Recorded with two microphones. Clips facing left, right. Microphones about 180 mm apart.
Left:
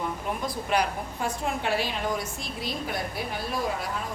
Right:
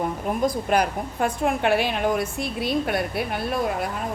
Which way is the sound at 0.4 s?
50° right (ahead or behind).